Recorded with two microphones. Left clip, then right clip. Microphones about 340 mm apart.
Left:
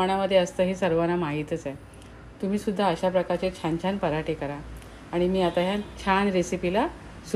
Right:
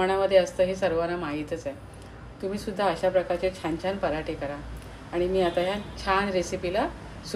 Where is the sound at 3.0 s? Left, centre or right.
Centre.